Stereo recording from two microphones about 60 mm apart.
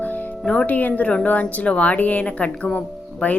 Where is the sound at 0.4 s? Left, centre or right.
Centre.